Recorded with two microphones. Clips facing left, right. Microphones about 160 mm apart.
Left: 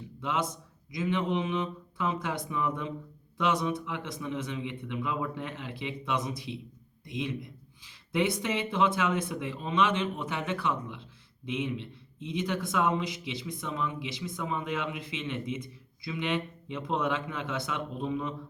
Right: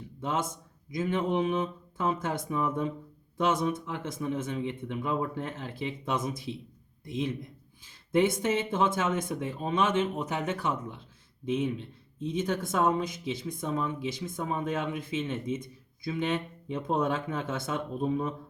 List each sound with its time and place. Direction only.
0.2 s a man's voice: 45° right (ahead or behind)
7.9 s a man's voice: 45° right (ahead or behind)